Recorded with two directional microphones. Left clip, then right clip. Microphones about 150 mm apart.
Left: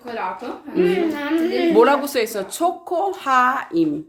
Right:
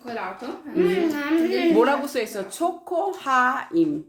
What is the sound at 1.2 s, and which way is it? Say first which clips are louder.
Speech: left 2 dB; 10° right (ahead or behind).